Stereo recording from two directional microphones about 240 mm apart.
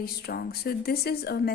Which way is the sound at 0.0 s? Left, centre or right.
Left.